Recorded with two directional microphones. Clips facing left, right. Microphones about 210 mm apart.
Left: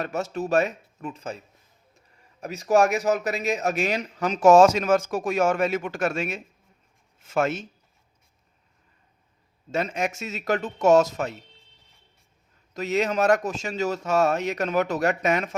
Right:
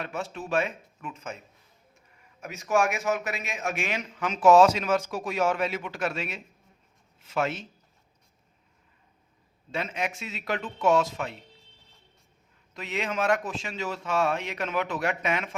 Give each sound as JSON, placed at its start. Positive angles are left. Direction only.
{"t": 0.0, "sound": "speech", "side_deg": 40}
{"t": 2.4, "sound": "speech", "side_deg": 35}
{"t": 9.7, "sound": "speech", "side_deg": 45}
{"t": 12.7, "sound": "speech", "side_deg": 40}